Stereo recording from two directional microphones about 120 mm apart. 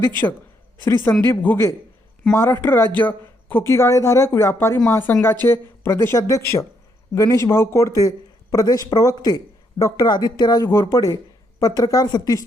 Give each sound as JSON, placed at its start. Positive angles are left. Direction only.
{"t": 0.9, "sound": "speech", "side_deg": 20}